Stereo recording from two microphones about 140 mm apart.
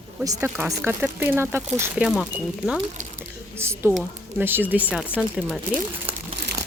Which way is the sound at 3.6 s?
20° right (ahead or behind).